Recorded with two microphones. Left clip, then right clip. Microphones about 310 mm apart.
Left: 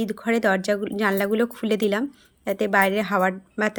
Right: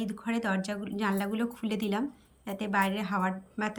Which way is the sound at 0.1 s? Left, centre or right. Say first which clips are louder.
Left 13 dB; centre.